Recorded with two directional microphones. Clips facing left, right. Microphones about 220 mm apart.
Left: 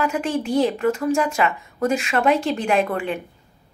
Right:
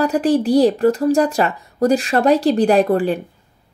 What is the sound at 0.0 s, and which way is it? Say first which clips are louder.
Speech: right 7 dB; 35° right (ahead or behind).